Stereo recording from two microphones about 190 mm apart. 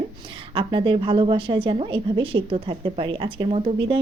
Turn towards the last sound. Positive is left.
turn(degrees=-25)  # may be behind; listen again after turning